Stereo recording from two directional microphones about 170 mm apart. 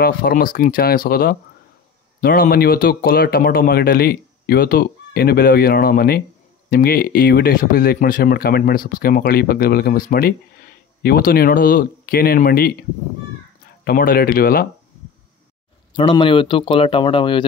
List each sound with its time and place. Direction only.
0.0 s speech: 60° left (ahead or behind)
13.8 s speech: 60° left (ahead or behind)
16.0 s speech: 30° left (ahead or behind)